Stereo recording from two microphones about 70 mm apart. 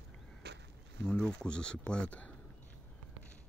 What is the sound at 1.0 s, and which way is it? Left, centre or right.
Speech, centre.